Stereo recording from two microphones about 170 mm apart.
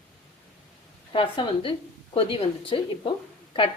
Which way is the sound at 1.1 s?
30° left (ahead or behind).